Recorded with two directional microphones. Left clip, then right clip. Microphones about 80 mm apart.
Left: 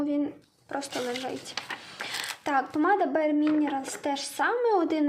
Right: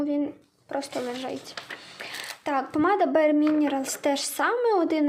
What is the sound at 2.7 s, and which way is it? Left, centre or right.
A woman's voice, right.